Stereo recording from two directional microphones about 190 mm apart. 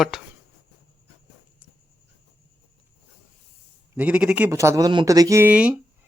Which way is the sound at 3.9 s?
5° right (ahead or behind).